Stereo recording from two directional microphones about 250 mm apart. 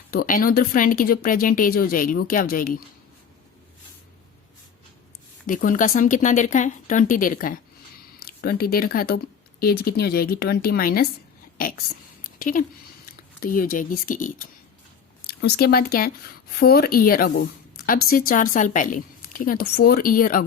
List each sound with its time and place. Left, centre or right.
0.1 s speech: left
5.5 s speech: left
12.2 s a sound: left
13.4 s speech: left